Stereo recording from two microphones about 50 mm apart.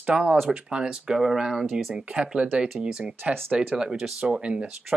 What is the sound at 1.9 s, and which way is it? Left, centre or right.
Speech, centre.